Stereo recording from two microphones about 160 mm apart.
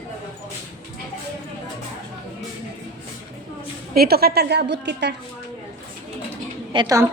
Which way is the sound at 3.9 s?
75° right (ahead or behind).